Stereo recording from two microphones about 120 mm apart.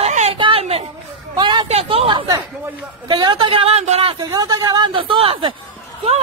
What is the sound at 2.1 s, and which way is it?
A woman's voice, 40° right (ahead or behind).